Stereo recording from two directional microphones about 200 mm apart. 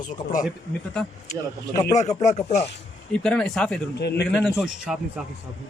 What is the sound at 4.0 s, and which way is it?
Speech, 55° left (ahead or behind).